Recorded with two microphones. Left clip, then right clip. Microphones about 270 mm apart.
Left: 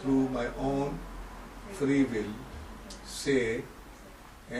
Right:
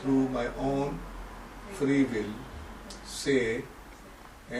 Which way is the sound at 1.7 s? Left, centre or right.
Centre.